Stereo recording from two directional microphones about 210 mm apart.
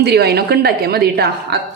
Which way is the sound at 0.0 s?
50° right (ahead or behind).